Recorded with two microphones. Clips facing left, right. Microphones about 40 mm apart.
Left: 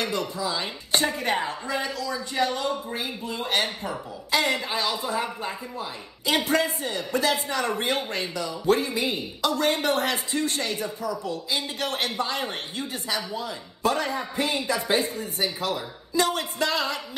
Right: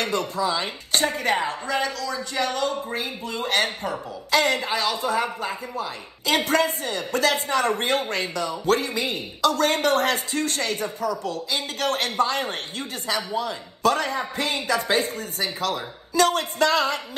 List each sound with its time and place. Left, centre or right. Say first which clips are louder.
0.0 s speech: right 3 dB; right
1.8 s speech: right 3 dB; right